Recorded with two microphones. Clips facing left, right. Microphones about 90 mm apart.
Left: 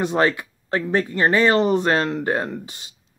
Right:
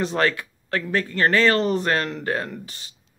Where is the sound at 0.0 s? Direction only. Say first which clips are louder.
Left 3 dB; 20° left (ahead or behind).